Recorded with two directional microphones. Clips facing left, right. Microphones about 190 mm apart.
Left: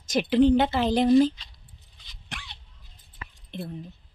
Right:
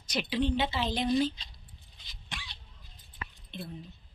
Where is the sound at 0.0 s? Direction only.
45° left (ahead or behind).